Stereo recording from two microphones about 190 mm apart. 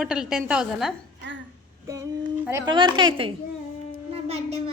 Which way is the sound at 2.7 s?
25° right (ahead or behind).